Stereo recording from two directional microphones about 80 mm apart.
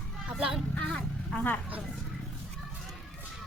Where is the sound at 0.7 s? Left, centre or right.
Centre.